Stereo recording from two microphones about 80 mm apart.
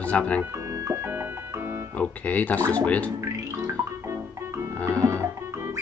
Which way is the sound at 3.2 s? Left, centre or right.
Right.